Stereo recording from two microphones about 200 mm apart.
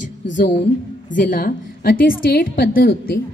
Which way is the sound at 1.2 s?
45° left (ahead or behind).